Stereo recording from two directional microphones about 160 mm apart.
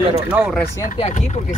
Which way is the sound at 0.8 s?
45° left (ahead or behind).